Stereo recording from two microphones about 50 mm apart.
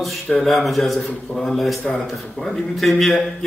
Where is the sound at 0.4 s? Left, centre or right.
Centre.